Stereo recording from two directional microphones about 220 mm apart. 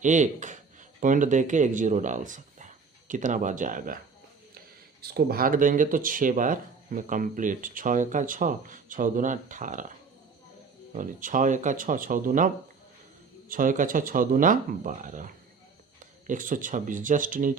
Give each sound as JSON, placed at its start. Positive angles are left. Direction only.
{"t": 0.0, "sound": "speech", "side_deg": -35}
{"t": 5.0, "sound": "speech", "side_deg": -45}
{"t": 10.9, "sound": "speech", "side_deg": -35}
{"t": 13.5, "sound": "speech", "side_deg": -40}